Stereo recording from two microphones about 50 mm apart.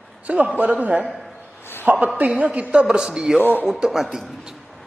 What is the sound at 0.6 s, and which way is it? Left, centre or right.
Speech, right.